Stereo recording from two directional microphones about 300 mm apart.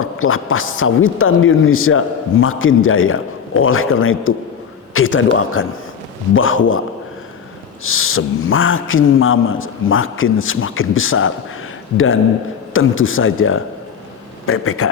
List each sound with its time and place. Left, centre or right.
0.0 s a woman's voice: left
7.9 s a woman's voice: left